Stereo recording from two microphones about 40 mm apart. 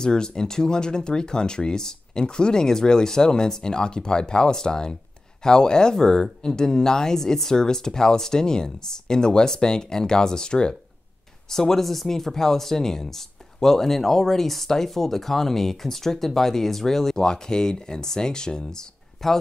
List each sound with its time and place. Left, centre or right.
0.0 s speech: centre